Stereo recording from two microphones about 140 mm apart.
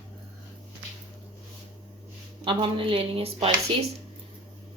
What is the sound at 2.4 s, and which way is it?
Speech, 35° right (ahead or behind).